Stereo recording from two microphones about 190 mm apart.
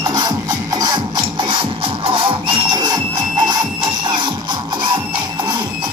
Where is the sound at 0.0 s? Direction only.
20° right (ahead or behind).